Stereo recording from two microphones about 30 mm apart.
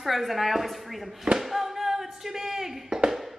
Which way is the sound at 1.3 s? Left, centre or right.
Centre.